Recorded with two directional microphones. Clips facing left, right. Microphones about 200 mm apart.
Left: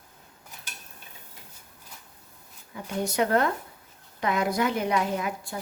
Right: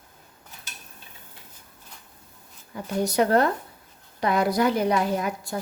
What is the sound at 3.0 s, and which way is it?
A woman's voice, 35° right (ahead or behind).